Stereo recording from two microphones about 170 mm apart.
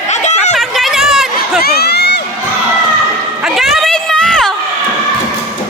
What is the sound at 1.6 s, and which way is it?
Crowd, 70° left (ahead or behind).